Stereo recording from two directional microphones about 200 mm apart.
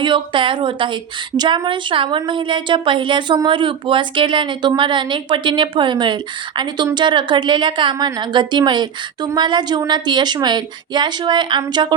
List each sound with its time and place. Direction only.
0.0 s a woman's voice: 25° right (ahead or behind)